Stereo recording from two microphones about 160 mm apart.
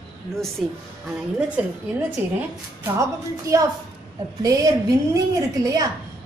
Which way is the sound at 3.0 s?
20° right (ahead or behind).